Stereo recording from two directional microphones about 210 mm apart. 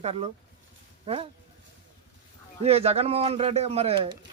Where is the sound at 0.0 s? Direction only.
30° right (ahead or behind).